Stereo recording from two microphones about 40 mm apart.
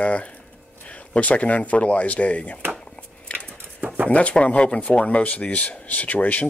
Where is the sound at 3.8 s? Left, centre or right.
Right.